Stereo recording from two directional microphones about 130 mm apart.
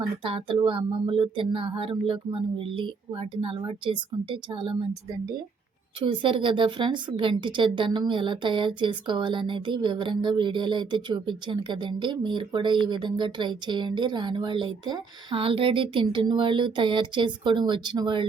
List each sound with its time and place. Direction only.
0.2 s speech: 40° right (ahead or behind)
6.1 s a woman's voice: 40° right (ahead or behind)